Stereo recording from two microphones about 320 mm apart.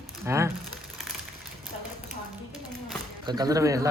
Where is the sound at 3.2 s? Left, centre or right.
Centre.